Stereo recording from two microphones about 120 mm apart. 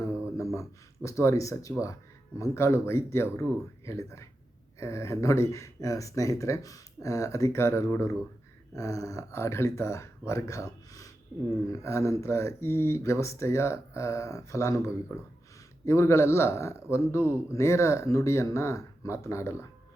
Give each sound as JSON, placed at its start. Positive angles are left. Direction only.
{"t": 0.3, "sound": "speech", "side_deg": 25}